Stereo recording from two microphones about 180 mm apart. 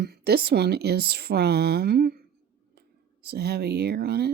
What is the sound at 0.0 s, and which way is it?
Speech, 60° right (ahead or behind).